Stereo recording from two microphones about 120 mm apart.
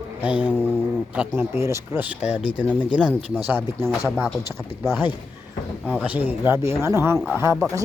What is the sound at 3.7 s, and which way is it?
Speech, 25° right (ahead or behind).